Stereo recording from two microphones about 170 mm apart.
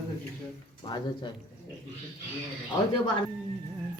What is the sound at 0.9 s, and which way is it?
Speech, 25° left (ahead or behind).